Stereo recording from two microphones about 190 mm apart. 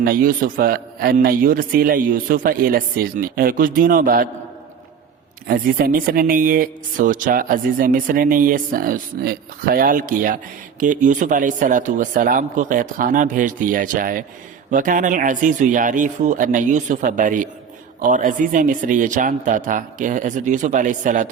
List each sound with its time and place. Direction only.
0.0 s speech: 50° right (ahead or behind)
5.5 s speech: 50° right (ahead or behind)